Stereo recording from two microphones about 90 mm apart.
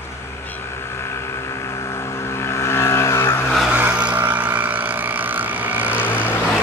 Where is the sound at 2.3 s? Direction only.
30° left (ahead or behind).